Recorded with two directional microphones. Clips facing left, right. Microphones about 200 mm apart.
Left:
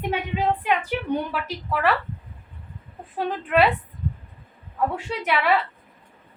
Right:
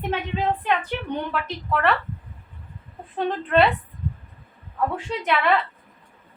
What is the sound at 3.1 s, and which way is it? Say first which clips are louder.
Speech: right 1 dB; 5° left (ahead or behind).